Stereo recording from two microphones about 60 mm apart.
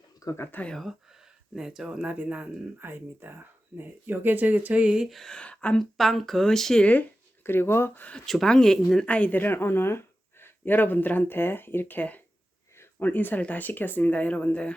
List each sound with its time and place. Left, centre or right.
0.3 s speech: left
0.8 s speech: centre
2.0 s speech: right
2.7 s speech: right; by 5.0 s centre
5.0 s speech: centre
5.4 s speech: centre
6.0 s speech: centre
6.8 s speech: left
7.4 s speech: left
8.3 s speech: centre
9.0 s speech: left